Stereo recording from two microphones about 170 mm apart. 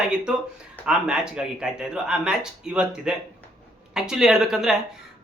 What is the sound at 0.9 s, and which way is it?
Speech, 5° right (ahead or behind).